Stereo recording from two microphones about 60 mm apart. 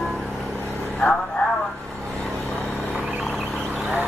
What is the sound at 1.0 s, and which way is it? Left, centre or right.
Vehicle, centre.